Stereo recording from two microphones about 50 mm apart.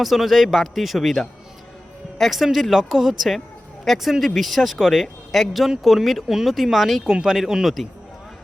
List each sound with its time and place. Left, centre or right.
0.0 s speech: centre